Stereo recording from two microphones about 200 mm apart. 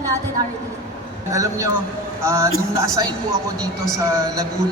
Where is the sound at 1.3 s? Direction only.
15° right (ahead or behind).